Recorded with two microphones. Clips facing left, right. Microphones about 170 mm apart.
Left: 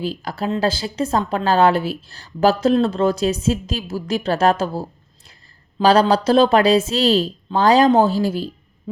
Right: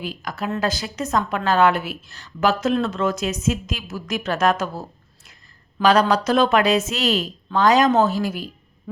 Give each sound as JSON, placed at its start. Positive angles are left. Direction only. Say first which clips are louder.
{"t": 0.0, "sound": "speech", "louder": "left 4 dB", "side_deg": 30}